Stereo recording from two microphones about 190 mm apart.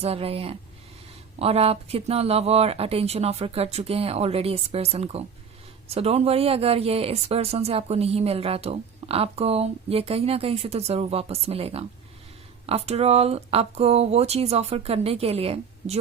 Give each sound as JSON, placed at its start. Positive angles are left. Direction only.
{"t": 0.0, "sound": "speech", "side_deg": -30}